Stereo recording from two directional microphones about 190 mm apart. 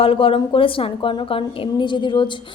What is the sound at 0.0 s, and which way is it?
A woman's voice, 30° left (ahead or behind).